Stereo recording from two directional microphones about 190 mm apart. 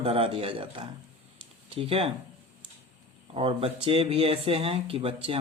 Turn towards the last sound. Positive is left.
turn(degrees=-30)  # may be behind; listen again after turning